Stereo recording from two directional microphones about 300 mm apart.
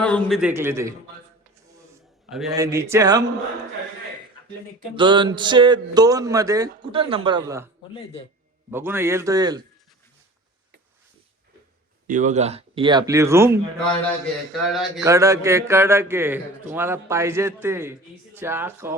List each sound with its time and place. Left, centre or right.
0.0 s a man's voice: centre
2.3 s speech: centre
4.9 s speech: centre
8.7 s speech: centre
12.0 s speech: right; by 18.9 s centre